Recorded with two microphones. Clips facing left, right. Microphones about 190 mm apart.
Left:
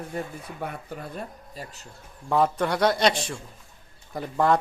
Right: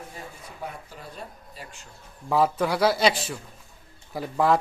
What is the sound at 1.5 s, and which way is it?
Speech, 40° left (ahead or behind).